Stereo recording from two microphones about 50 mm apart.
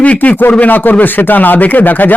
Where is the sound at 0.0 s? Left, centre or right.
Left.